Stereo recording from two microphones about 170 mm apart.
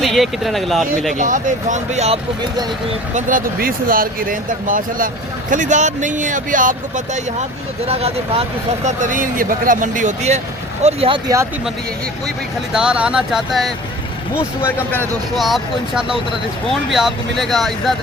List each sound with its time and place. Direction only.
0.0 s speech: centre (ahead or behind)
1.1 s speech: 50° right (ahead or behind)
3.2 s speech: 50° right (ahead or behind)
7.9 s speech: 35° right (ahead or behind)
10.8 s speech: 35° right (ahead or behind)
12.7 s speech: 5° right (ahead or behind)
15.4 s speech: centre (ahead or behind)